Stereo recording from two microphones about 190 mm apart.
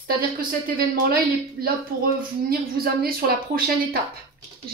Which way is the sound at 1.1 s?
50° right (ahead or behind).